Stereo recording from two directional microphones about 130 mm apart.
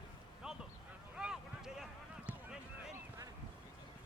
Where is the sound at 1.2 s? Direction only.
5° right (ahead or behind).